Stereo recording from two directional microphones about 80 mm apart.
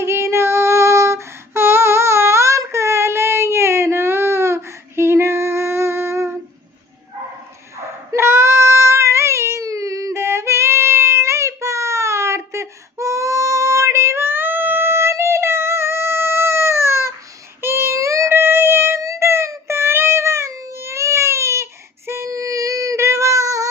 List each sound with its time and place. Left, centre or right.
0.0 s female singing: right
8.1 s child singing: right
17.6 s a sound: right
18.3 s music: right